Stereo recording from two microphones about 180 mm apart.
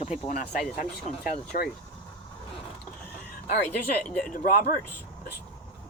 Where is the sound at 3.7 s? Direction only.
5° left (ahead or behind).